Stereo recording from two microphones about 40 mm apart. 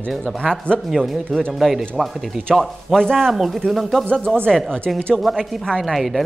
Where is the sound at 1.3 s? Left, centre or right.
Centre.